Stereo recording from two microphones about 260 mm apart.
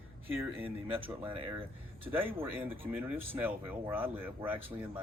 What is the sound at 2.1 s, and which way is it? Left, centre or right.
Speech, centre.